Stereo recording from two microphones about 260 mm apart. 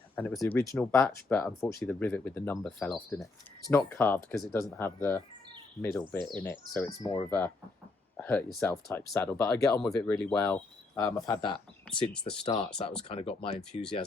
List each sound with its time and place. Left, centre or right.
0.2 s speech: centre
11.9 s speech: centre
12.4 s speech: left